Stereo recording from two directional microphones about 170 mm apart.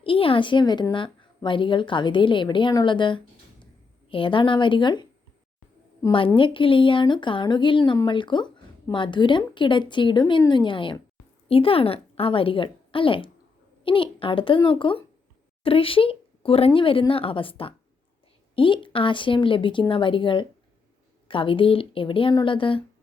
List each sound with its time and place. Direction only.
0.0 s a woman's voice: 30° left (ahead or behind)